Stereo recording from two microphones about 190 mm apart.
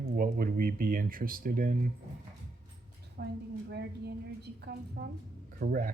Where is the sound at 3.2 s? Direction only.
60° right (ahead or behind).